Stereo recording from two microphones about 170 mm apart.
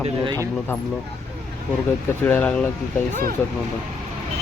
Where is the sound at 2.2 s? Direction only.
10° left (ahead or behind).